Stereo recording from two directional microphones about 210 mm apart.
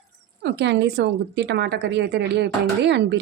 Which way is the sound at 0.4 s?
55° right (ahead or behind).